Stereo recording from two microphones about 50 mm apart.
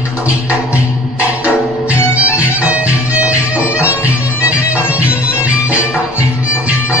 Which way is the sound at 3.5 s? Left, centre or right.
Right.